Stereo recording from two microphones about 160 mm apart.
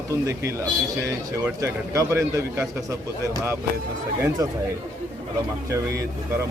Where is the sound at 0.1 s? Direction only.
20° right (ahead or behind).